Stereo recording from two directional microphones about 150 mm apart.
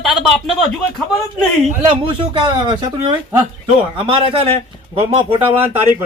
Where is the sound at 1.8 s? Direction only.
35° right (ahead or behind).